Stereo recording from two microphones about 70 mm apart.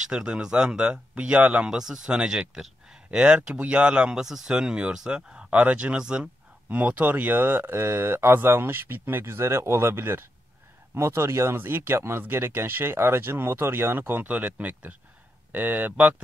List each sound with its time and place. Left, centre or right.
0.0 s speech: centre